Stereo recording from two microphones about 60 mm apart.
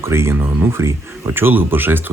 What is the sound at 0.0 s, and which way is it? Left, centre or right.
Speech, right.